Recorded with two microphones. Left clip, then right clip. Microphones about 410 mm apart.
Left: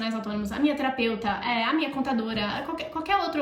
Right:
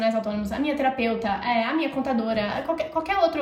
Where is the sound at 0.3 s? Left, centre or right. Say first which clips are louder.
Even; centre.